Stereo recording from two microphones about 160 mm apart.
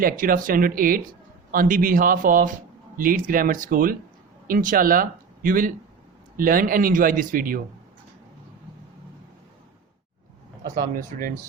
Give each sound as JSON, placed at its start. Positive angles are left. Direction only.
{"t": 0.0, "sound": "a man's voice", "side_deg": -60}
{"t": 10.8, "sound": "a man's voice", "side_deg": -60}